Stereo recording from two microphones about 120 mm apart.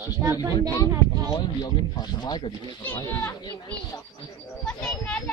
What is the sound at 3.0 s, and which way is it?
Speech, 25° left (ahead or behind).